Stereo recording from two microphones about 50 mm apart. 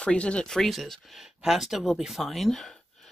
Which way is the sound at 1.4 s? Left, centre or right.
Centre.